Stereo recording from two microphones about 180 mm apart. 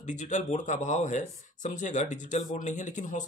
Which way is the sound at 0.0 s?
45° left (ahead or behind).